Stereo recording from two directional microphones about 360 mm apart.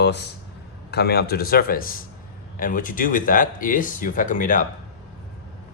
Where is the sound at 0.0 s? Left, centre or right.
Left.